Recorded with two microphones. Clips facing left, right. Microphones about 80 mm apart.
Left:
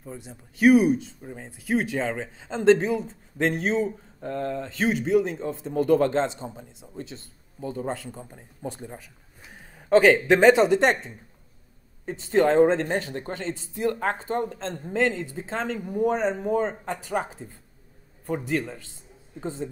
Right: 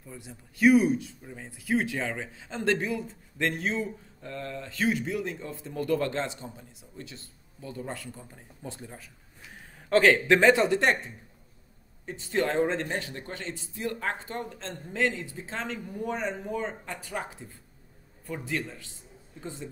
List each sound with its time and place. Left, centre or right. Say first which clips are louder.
0.2 s a man's voice: left 3 dB; centre
4.2 s a man's voice: left 8 dB; left
12.1 s speech: left 7 dB; left
18.5 s speech: left 6 dB; left